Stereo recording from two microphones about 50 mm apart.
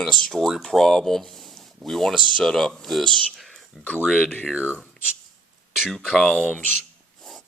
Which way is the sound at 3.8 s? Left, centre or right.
Left.